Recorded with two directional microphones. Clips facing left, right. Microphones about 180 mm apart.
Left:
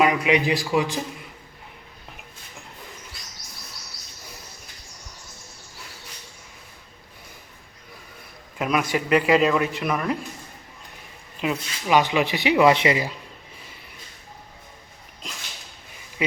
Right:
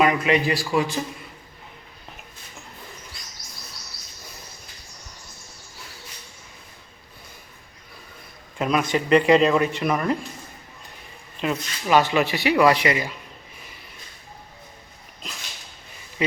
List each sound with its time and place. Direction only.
0.0 s a man's voice: 10° left (ahead or behind)
8.5 s a man's voice: 5° left (ahead or behind)
11.3 s speech: 10° left (ahead or behind); by 13.1 s 30° left (ahead or behind)